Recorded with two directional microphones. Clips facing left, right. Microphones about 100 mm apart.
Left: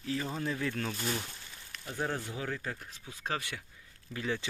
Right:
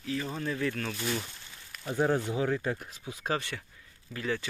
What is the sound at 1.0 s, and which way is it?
Speech, 5° left (ahead or behind).